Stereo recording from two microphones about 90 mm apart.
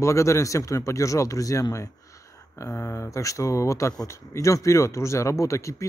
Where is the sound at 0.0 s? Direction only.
35° left (ahead or behind).